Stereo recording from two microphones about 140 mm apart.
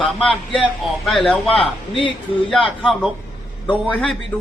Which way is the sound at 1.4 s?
40° left (ahead or behind).